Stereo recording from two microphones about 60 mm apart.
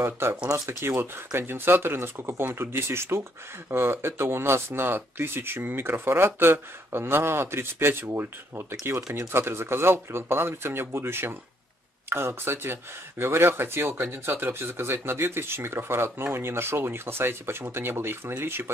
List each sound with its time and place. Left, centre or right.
0.0 s speech: right